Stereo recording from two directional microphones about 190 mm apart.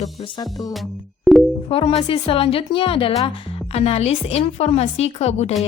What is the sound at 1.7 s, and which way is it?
Speech, 30° left (ahead or behind).